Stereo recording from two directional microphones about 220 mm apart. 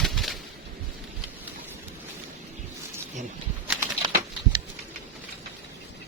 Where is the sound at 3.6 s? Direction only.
10° right (ahead or behind).